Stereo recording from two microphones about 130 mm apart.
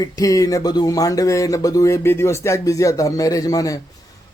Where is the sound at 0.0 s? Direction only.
25° left (ahead or behind).